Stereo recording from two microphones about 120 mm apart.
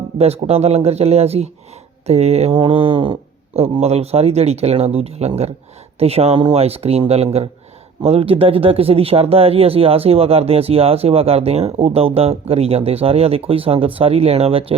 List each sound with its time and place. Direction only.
0.2 s speech: 60° right (ahead or behind)
2.6 s mantra: 45° right (ahead or behind)
3.8 s speech: 60° right (ahead or behind)